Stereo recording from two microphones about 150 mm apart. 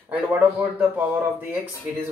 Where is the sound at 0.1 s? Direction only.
10° right (ahead or behind).